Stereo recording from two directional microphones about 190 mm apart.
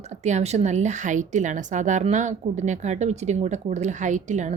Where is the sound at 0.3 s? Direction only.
35° right (ahead or behind).